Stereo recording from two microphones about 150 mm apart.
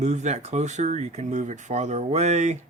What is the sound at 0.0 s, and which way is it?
Speech, 50° right (ahead or behind).